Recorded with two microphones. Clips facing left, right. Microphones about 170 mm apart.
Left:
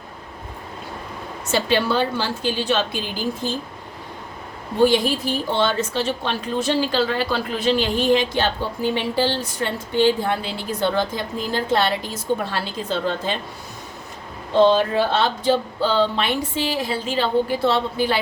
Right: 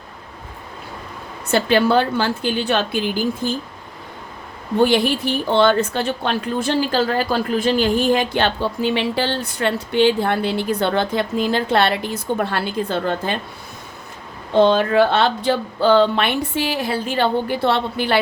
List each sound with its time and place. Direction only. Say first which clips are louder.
1.5 s a woman's voice: right 4 dB; 50° right (ahead or behind)
4.9 s a woman's voice: right 2 dB; 65° right (ahead or behind)
14.5 s a woman's voice: right 2 dB; 60° right (ahead or behind)